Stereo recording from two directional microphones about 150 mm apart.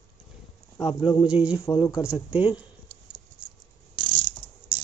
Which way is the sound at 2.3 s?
10° right (ahead or behind).